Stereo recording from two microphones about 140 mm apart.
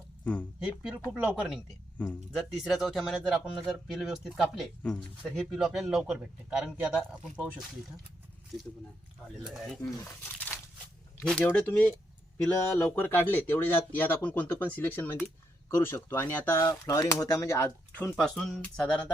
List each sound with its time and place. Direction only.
1.1 s speech: 10° right (ahead or behind)
2.0 s speech: 10° left (ahead or behind)
2.4 s a man's voice: centre (ahead or behind)
9.4 s a man's voice: centre (ahead or behind)
11.2 s speech: 10° left (ahead or behind)
18.2 s a man's voice: centre (ahead or behind)